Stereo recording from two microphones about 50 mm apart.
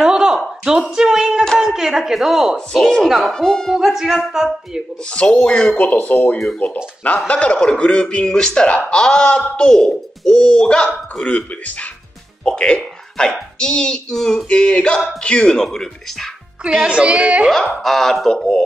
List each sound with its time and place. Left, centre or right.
0.0 s a sound: centre
0.7 s speech: centre
2.9 s speech: centre
3.3 s a child's voice: centre
3.7 s speech: centre
5.1 s a man's voice: left
9.7 s a child's voice: centre
16.8 s a woman's voice: right
17.5 s a child's voice: centre